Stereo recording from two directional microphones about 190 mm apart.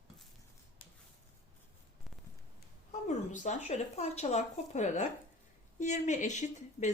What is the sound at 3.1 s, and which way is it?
Speech, 40° left (ahead or behind).